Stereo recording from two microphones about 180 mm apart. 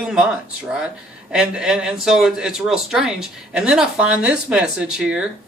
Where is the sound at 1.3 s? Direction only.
5° right (ahead or behind).